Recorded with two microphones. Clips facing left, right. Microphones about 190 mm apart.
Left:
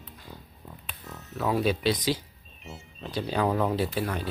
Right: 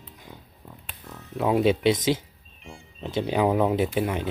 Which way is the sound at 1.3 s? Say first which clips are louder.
Right 5 dB; 25° right (ahead or behind).